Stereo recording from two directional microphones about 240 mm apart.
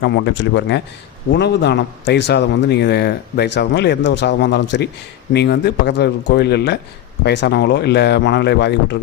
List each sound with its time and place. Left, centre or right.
0.0 s a man's voice: left